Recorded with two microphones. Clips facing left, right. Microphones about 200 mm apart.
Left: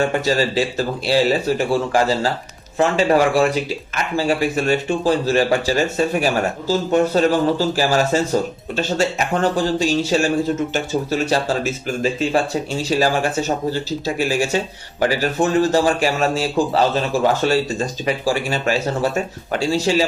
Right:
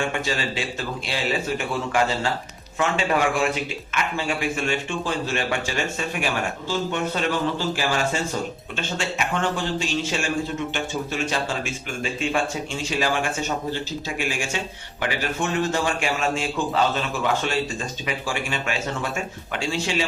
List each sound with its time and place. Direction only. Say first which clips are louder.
0.0 s speech: left 8 dB; 40° left (ahead or behind)